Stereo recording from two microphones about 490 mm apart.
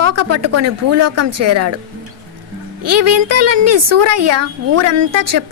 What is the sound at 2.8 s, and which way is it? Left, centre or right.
A woman's voice, right.